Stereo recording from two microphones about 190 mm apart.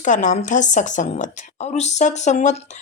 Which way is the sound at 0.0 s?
40° left (ahead or behind).